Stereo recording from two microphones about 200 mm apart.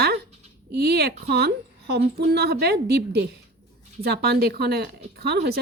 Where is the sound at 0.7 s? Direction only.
55° right (ahead or behind).